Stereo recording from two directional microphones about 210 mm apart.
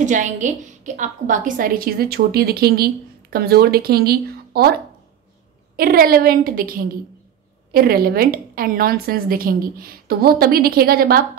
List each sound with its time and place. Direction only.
0.0 s a woman's voice: 35° right (ahead or behind)
5.8 s a woman's voice: 45° right (ahead or behind)